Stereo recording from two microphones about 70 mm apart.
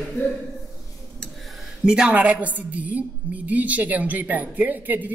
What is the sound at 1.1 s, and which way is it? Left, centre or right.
A woman's voice, centre.